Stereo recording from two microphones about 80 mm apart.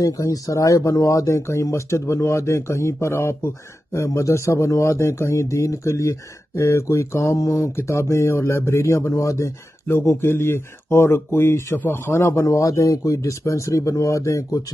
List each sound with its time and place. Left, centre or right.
0.0 s speech: left